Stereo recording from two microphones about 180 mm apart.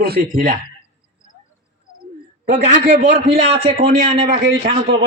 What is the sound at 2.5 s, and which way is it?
Speech, 55° right (ahead or behind).